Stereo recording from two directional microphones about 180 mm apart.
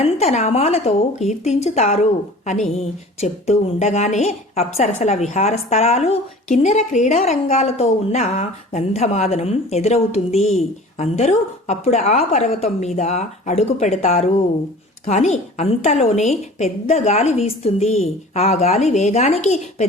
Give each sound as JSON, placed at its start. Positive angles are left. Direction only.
{"t": 0.0, "sound": "speech", "side_deg": 35}